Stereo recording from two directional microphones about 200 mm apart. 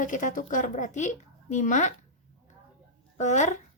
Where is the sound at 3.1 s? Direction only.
35° left (ahead or behind).